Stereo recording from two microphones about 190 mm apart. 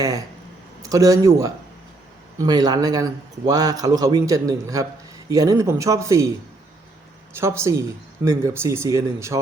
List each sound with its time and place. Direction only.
0.8 s a man's voice: 20° right (ahead or behind)
7.3 s speech: 15° right (ahead or behind)